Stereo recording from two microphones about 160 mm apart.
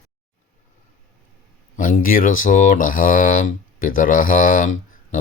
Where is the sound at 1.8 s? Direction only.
60° left (ahead or behind).